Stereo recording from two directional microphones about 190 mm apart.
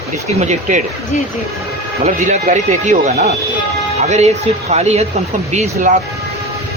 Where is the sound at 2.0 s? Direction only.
40° right (ahead or behind).